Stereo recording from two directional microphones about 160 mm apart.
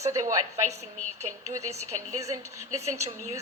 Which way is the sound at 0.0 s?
20° right (ahead or behind).